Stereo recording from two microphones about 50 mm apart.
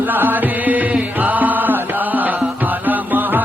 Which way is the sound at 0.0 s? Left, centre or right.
Right.